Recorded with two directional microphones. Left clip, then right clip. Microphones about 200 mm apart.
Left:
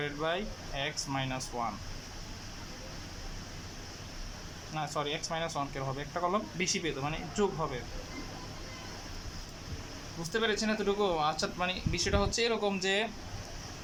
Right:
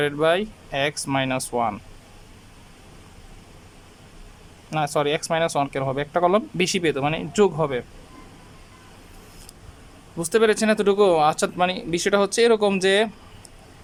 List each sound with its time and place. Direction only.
0.0 s speech: 50° right (ahead or behind)
4.7 s speech: 50° right (ahead or behind)
10.3 s speech: 55° right (ahead or behind)